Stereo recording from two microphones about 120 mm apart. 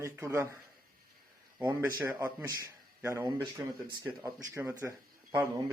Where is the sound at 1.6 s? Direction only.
20° right (ahead or behind).